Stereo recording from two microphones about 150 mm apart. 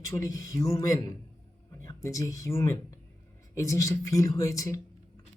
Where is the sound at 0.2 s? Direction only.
20° left (ahead or behind).